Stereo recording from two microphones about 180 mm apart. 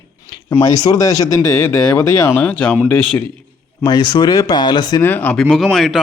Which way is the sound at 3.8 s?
25° left (ahead or behind).